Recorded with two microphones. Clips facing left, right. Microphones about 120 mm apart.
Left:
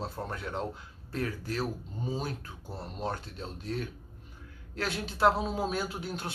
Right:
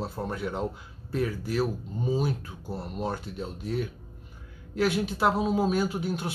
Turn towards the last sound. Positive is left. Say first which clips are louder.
# right 7 dB
turn(degrees=-5)  # may be behind; listen again after turning